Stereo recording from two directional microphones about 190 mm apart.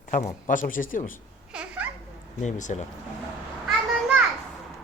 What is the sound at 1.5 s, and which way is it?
Babbling, 5° right (ahead or behind).